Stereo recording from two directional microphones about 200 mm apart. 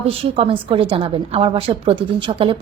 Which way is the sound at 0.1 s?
25° right (ahead or behind).